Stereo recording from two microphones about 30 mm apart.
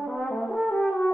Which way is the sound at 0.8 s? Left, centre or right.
Left.